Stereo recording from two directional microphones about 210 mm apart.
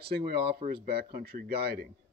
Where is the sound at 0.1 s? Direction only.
50° right (ahead or behind).